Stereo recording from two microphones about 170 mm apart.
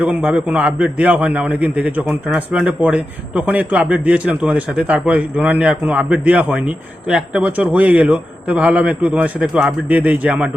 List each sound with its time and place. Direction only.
0.0 s a man's voice: 10° right (ahead or behind)